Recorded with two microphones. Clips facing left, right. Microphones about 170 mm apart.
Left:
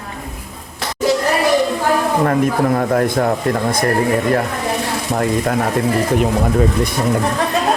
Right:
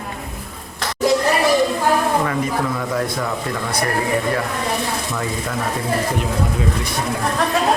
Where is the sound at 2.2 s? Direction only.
55° left (ahead or behind).